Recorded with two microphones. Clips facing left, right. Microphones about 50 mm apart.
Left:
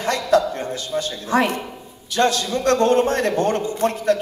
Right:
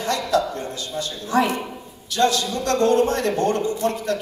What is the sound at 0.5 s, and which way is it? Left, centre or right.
A man's voice, left.